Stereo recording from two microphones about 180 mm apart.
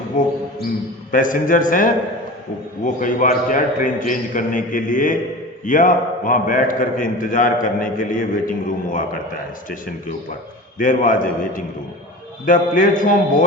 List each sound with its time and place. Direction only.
0.1 s a man's voice: 50° left (ahead or behind)
10.8 s a man's voice: 50° left (ahead or behind)
12.5 s a man's voice: 50° left (ahead or behind)